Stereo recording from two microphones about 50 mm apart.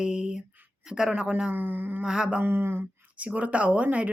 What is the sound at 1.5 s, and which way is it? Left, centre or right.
Speech, right.